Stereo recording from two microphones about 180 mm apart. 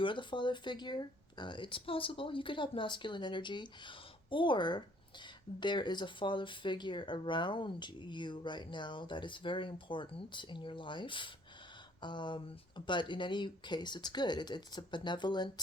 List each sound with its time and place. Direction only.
0.0 s speech: 25° left (ahead or behind)